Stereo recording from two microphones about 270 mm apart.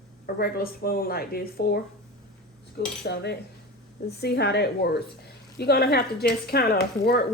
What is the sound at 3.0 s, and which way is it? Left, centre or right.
Speech, left.